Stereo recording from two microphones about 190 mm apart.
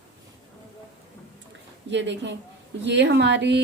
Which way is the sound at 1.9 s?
70° right (ahead or behind).